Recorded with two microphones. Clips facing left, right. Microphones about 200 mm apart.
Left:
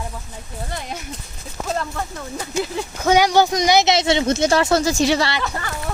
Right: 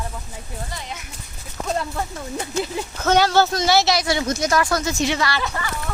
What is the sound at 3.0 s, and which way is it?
Speech, 10° left (ahead or behind).